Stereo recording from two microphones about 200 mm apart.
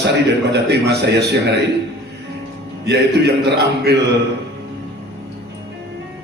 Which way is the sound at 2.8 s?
55° right (ahead or behind).